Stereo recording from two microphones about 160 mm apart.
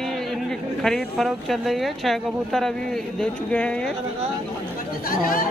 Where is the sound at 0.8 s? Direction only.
Centre (ahead or behind).